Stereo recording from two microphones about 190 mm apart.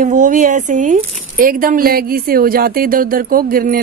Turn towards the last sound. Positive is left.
turn(degrees=-50)  # may be behind; listen again after turning